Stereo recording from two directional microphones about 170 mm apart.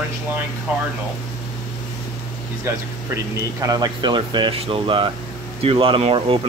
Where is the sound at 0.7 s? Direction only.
10° right (ahead or behind).